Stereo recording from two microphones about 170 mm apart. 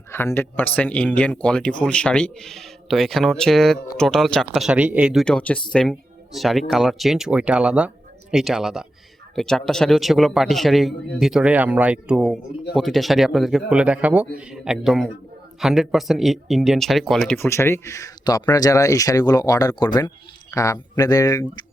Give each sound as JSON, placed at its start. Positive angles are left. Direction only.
{"t": 0.1, "sound": "a man's voice", "side_deg": 15}
{"t": 5.2, "sound": "a man's voice", "side_deg": 5}